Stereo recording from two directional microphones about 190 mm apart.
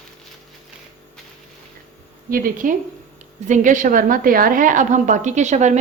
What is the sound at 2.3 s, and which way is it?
A woman's voice, 45° right (ahead or behind).